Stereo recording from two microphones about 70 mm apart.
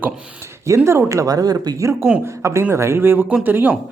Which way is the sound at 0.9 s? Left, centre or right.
Right.